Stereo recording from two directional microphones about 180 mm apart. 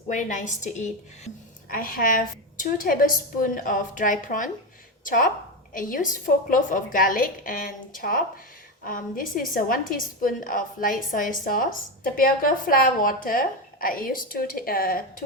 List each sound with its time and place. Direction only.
0.1 s a woman's voice: 45° left (ahead or behind)
1.7 s a woman's voice: 50° left (ahead or behind)